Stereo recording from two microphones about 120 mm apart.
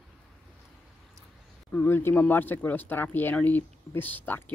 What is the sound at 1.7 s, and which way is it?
Speech, 20° left (ahead or behind).